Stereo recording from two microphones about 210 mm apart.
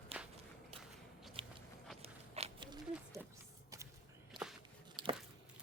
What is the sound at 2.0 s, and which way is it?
Biting, 30° right (ahead or behind).